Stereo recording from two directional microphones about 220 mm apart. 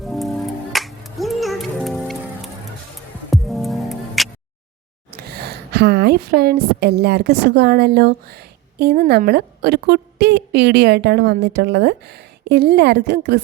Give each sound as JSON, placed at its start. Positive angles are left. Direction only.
{"t": 0.0, "sound": "music", "side_deg": 0}
{"t": 5.1, "sound": "a woman's voice", "side_deg": -45}